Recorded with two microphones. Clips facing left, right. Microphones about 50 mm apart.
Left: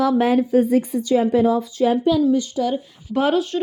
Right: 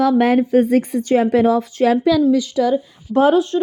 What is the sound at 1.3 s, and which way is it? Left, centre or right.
Speech, right.